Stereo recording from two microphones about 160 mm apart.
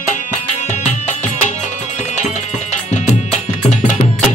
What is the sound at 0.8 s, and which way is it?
Music, 50° left (ahead or behind).